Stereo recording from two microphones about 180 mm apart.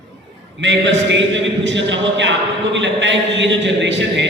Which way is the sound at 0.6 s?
90° right.